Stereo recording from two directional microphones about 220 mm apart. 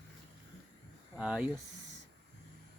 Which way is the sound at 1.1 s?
5° right (ahead or behind).